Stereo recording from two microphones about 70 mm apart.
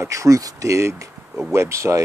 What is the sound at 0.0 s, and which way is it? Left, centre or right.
Speech, right.